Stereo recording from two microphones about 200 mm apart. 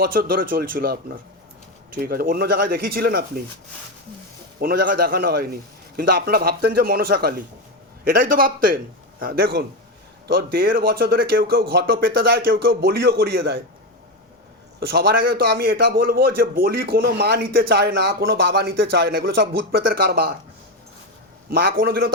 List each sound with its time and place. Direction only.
0.0 s a man's voice: 45° right (ahead or behind)
2.0 s a man's voice: 50° right (ahead or behind)
4.6 s a man's voice: 50° right (ahead or behind)
14.8 s a man's voice: 50° right (ahead or behind)
21.5 s a man's voice: 50° right (ahead or behind)